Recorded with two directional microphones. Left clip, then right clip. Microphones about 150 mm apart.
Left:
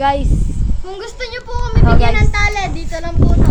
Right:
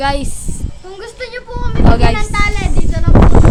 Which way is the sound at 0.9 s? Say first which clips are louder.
Even; 45° left (ahead or behind).